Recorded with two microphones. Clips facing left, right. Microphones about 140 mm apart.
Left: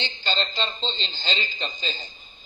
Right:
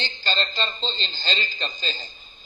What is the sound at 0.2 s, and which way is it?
A man's voice, 20° left (ahead or behind).